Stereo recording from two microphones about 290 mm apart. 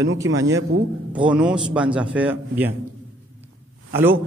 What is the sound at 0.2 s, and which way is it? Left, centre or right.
Speech, right.